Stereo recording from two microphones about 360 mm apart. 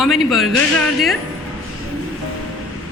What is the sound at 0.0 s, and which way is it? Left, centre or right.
Speech, centre.